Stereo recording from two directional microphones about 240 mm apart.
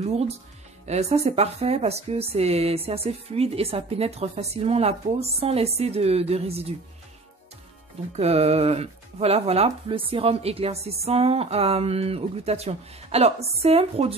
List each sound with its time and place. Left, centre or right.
0.0 s speech: right
8.2 s speech: right